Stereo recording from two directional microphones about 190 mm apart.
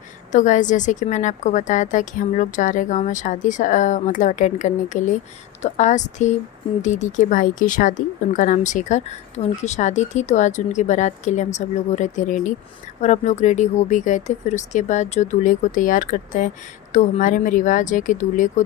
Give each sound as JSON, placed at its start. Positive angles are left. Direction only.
{"t": 0.3, "sound": "speech", "side_deg": 40}